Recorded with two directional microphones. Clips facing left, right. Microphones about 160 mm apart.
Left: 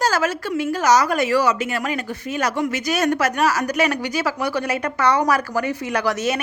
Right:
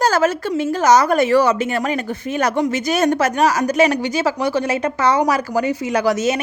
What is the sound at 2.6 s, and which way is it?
A woman's voice, 25° right (ahead or behind).